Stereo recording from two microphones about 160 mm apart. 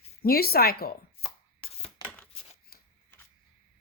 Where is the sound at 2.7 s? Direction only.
75° left (ahead or behind).